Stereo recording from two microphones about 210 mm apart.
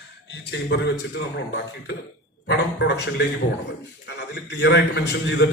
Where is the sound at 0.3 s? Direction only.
55° left (ahead or behind).